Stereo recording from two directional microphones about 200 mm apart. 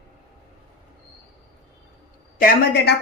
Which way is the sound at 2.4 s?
50° left (ahead or behind).